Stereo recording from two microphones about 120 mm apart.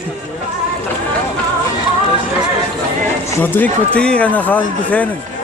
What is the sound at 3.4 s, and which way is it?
Speech, 15° left (ahead or behind).